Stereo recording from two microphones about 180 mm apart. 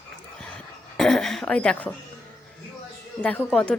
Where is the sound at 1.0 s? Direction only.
Centre (ahead or behind).